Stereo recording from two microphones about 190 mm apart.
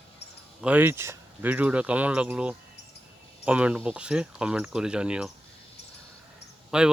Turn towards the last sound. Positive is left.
turn(degrees=-5)  # may be behind; listen again after turning